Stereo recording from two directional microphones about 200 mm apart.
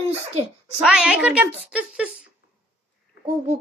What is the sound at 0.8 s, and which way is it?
A woman's voice, centre (ahead or behind).